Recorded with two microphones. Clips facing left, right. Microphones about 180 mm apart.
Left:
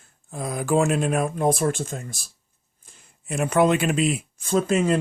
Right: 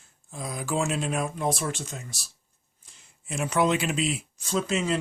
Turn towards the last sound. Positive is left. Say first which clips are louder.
# left 6 dB
turn(degrees=50)  # may be behind; listen again after turning